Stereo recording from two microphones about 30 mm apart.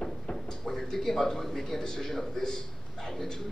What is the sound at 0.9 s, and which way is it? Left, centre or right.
A man's voice, centre.